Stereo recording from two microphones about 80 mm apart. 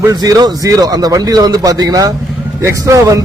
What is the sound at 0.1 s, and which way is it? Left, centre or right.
A man's voice, right.